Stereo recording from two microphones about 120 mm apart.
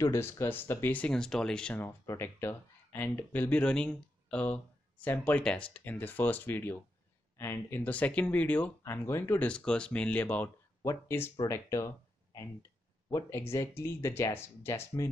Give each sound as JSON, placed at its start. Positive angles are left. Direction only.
{"t": 0.0, "sound": "speech", "side_deg": 20}
{"t": 9.5, "sound": "speech", "side_deg": 10}